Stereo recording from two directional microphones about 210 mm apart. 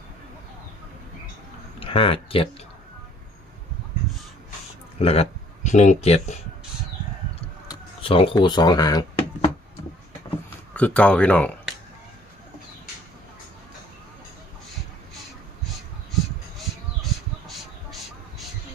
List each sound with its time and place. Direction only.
1.8 s speech: 25° left (ahead or behind)
4.9 s speech: 30° left (ahead or behind)
7.7 s speech: 25° left (ahead or behind)
10.8 s speech: 5° left (ahead or behind)